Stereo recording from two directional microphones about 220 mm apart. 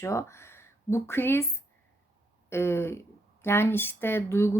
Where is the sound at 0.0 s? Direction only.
15° left (ahead or behind).